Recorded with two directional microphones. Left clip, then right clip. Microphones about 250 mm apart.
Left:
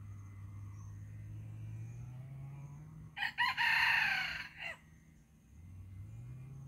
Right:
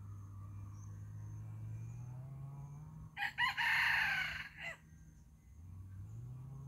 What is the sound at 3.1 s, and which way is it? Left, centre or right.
Chicken, centre.